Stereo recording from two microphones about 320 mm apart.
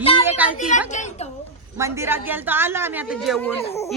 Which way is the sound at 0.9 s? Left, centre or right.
Left.